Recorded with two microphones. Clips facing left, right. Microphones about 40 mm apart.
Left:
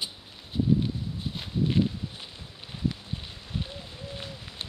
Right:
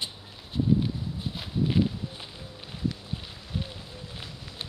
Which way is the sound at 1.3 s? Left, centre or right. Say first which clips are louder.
Even; centre.